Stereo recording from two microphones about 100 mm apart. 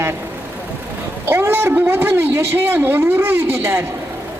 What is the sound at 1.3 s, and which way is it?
A woman's voice, 25° right (ahead or behind).